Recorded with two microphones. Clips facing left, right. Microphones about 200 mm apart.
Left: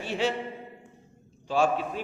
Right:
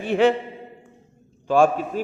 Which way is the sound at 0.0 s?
55° right (ahead or behind).